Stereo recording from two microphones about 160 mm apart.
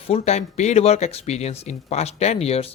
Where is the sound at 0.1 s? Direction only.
40° left (ahead or behind).